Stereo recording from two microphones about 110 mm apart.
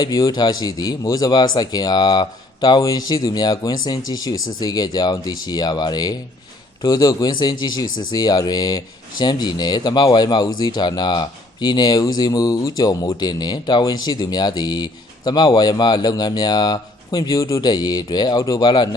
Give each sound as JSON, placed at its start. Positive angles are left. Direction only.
{"t": 0.0, "sound": "speech", "side_deg": 35}